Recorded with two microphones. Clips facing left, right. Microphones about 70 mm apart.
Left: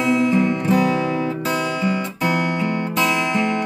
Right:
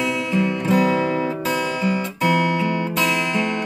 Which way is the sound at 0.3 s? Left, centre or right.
Left.